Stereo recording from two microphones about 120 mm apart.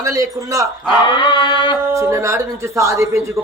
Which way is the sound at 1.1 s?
40° left (ahead or behind).